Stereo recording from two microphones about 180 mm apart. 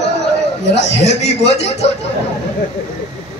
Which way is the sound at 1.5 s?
35° left (ahead or behind).